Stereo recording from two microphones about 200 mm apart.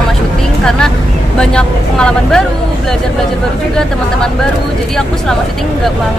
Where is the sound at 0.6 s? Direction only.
5° left (ahead or behind).